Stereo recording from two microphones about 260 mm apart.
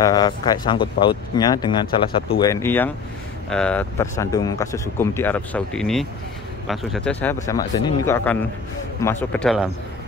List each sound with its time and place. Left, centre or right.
0.0 s a man's voice: centre